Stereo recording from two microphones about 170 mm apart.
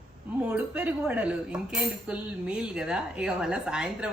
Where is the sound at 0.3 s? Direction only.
10° right (ahead or behind).